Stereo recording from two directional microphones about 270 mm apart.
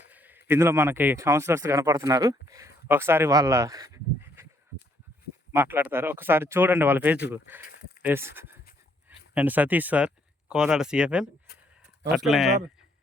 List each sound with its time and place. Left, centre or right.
0.1 s a man's voice: centre
5.5 s speech: centre